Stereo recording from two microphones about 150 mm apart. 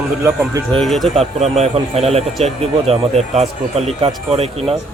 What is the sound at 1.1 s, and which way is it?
Speech, 45° right (ahead or behind).